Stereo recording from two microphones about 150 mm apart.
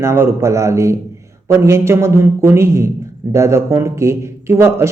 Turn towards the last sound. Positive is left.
turn(degrees=-20)  # may be behind; listen again after turning